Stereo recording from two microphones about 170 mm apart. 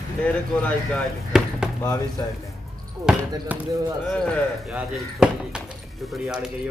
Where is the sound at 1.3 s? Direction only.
5° right (ahead or behind).